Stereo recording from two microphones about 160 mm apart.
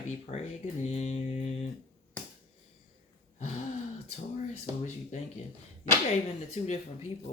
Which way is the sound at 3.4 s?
40° left (ahead or behind).